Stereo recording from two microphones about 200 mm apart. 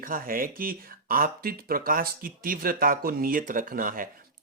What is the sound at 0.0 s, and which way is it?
Speech, 45° right (ahead or behind).